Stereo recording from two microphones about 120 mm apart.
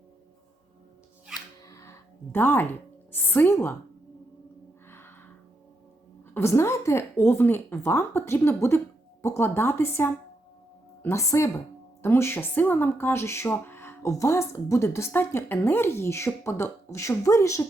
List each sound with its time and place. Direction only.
1.6 s music: 25° left (ahead or behind)
3.1 s speech: 20° left (ahead or behind)
4.9 s a sound: 20° left (ahead or behind)
6.3 s speech: 20° left (ahead or behind)